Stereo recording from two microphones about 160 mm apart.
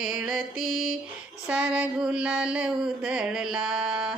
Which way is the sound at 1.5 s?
10° right (ahead or behind).